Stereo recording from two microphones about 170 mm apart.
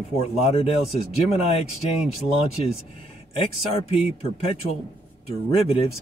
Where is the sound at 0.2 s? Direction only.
40° left (ahead or behind).